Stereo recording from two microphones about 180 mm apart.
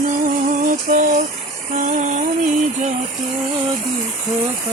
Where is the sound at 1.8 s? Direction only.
45° right (ahead or behind).